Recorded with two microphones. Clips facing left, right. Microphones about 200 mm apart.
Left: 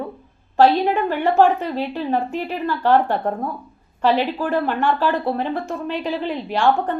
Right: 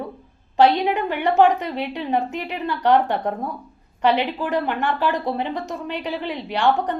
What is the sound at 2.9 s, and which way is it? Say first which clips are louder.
Speech: left 1 dB; 20° right (ahead or behind).